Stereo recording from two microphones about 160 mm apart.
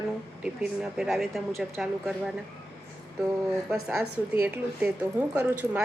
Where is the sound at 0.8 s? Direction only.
Centre (ahead or behind).